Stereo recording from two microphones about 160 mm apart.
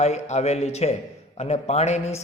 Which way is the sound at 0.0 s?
45° left (ahead or behind).